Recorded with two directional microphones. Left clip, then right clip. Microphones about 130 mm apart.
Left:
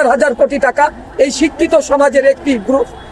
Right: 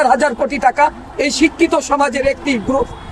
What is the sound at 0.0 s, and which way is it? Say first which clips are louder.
Speech: left 3 dB; 25° right (ahead or behind).